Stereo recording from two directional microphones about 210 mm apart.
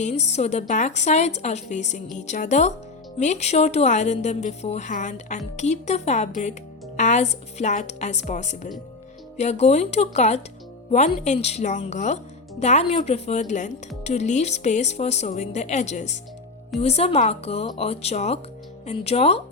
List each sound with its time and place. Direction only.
0.0 s speech: 30° left (ahead or behind)